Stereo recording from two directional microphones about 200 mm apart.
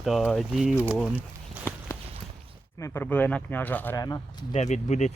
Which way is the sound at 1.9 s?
15° left (ahead or behind).